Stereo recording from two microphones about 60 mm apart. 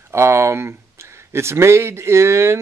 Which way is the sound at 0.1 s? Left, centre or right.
Right.